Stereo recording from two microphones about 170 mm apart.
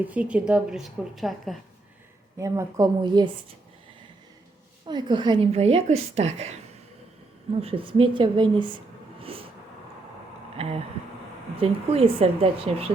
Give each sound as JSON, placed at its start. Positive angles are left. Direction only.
{"t": 0.0, "sound": "a woman's voice", "side_deg": -10}
{"t": 2.4, "sound": "a woman's voice", "side_deg": -20}
{"t": 4.9, "sound": "a woman's voice", "side_deg": -25}
{"t": 7.6, "sound": "a woman's voice", "side_deg": -35}
{"t": 9.2, "sound": "vehicle", "side_deg": -35}
{"t": 11.6, "sound": "a woman's voice", "side_deg": -35}